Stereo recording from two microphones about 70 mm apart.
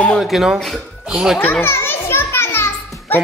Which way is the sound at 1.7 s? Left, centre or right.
Left.